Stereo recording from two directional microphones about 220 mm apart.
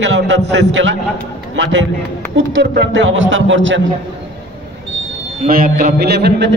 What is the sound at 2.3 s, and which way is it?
A man's voice, 50° right (ahead or behind).